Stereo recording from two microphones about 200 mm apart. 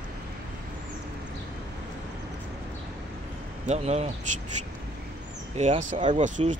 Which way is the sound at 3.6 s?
35° right (ahead or behind).